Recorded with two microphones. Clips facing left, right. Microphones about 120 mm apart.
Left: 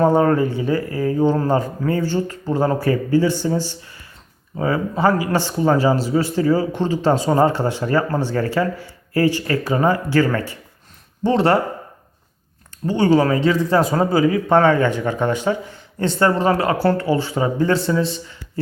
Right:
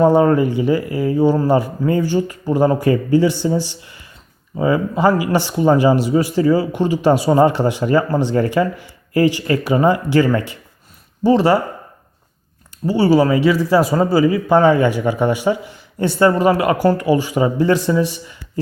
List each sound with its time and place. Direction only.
0.0 s speech: 15° right (ahead or behind)
11.2 s a man's voice: 5° right (ahead or behind)
12.8 s a man's voice: 10° right (ahead or behind)